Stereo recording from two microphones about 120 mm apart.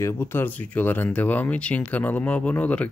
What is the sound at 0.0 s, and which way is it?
Speech, 20° left (ahead or behind).